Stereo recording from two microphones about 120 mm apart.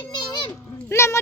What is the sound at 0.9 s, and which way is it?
Speech, 25° left (ahead or behind).